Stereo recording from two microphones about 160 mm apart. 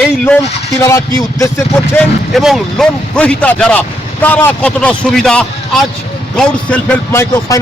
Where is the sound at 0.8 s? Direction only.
20° left (ahead or behind).